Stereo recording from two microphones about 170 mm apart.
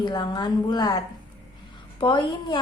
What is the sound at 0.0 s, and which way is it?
A woman's voice, 25° left (ahead or behind).